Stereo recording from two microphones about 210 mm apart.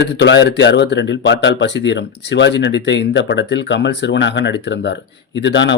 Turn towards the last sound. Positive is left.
turn(degrees=60)  # may be behind; listen again after turning